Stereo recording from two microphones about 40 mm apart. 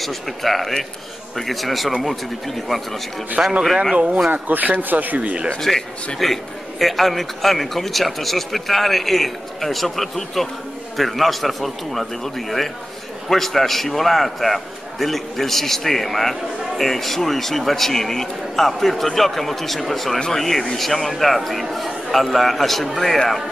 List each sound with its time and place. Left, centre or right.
0.0 s a man's voice: centre
3.4 s speech: centre
3.9 s speech: right
4.3 s speech: right
5.6 s a man's voice: centre